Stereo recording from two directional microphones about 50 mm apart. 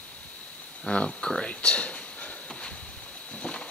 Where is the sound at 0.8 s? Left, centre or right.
Left.